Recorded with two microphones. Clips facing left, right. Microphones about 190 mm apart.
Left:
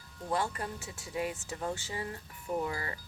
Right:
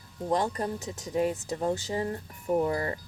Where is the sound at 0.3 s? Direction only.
40° right (ahead or behind).